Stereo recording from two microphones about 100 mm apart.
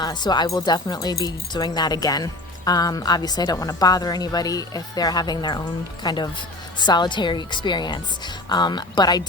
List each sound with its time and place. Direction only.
0.0 s a woman's voice: 45° left (ahead or behind)